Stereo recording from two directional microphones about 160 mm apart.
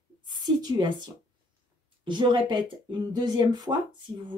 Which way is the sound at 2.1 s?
30° right (ahead or behind).